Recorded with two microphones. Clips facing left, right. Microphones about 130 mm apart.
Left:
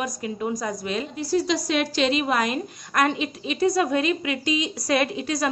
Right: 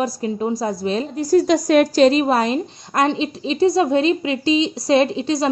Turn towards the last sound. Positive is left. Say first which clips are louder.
# right 7 dB
turn(degrees=-25)  # may be behind; listen again after turning